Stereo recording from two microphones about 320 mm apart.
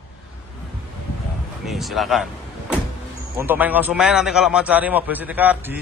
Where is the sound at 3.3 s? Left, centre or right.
Centre.